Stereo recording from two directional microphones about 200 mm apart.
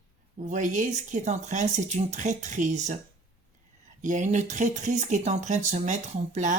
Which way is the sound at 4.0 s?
40° right (ahead or behind).